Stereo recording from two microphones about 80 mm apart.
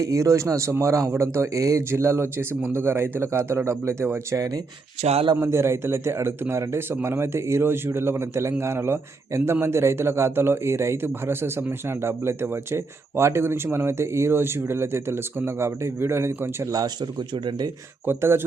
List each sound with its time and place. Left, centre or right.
0.0 s a man's voice: right
4.3 s speech: right
5.4 s a man's voice: right
16.7 s speech: right
18.0 s speech: right